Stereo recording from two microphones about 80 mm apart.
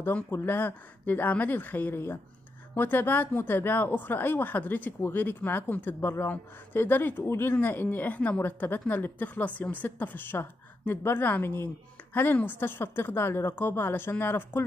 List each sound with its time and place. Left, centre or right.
0.0 s speech: left